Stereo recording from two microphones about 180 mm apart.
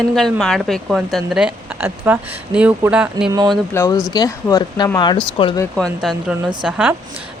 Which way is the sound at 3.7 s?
20° left (ahead or behind).